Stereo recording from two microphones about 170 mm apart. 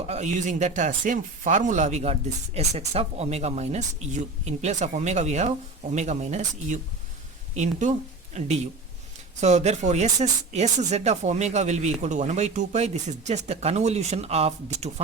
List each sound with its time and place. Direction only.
0.1 s speech: 45° right (ahead or behind)